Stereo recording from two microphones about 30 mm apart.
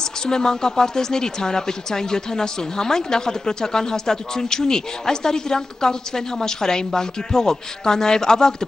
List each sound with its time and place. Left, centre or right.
0.3 s a woman's voice: left